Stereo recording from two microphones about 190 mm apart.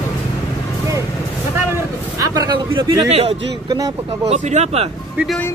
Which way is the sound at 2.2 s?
20° right (ahead or behind).